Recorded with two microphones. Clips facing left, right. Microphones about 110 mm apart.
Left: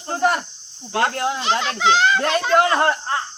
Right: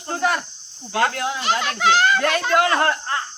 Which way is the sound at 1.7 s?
20° left (ahead or behind).